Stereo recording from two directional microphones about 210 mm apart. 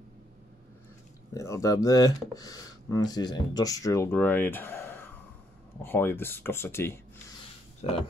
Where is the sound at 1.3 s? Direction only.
15° left (ahead or behind).